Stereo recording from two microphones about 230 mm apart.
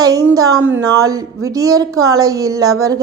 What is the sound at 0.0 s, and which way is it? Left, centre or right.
Speech, centre.